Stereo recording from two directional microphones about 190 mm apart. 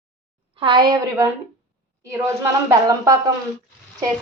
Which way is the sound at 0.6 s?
25° right (ahead or behind).